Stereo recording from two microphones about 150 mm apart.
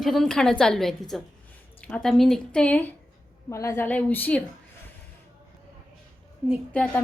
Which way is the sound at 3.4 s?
20° left (ahead or behind).